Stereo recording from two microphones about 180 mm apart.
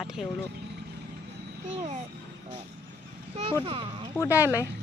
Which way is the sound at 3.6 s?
30° right (ahead or behind).